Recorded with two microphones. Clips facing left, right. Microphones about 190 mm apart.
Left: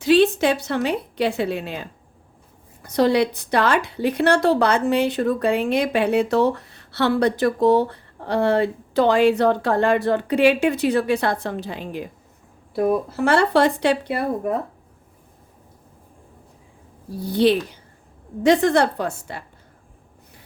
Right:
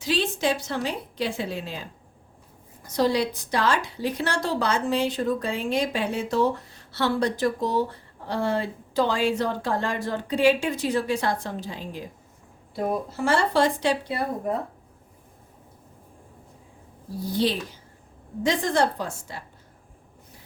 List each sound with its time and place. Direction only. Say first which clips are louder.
0.0 s a woman's voice: left 9 dB; 60° left (ahead or behind)
17.3 s a woman's voice: left 8 dB; 60° left (ahead or behind)